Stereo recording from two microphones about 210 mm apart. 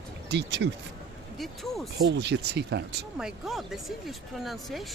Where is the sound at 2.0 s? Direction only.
55° right (ahead or behind).